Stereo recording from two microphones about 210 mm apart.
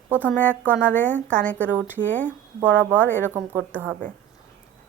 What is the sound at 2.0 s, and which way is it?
Speech, 5° left (ahead or behind).